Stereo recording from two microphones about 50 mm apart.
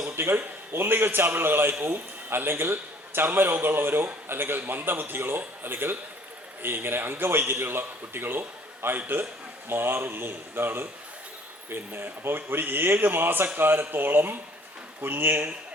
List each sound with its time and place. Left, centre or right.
0.2 s a man's voice: right